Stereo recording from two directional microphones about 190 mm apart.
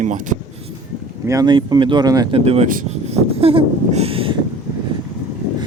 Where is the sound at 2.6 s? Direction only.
45° right (ahead or behind).